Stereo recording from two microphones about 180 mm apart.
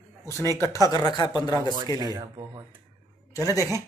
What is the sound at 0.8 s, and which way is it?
Speech, 20° left (ahead or behind).